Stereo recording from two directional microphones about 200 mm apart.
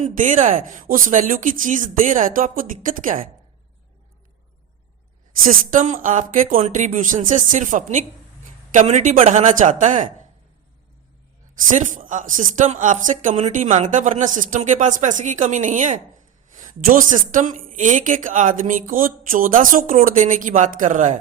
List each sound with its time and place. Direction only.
0.0 s speech: 40° right (ahead or behind)
5.4 s speech: 40° right (ahead or behind)
11.7 s speech: 40° right (ahead or behind)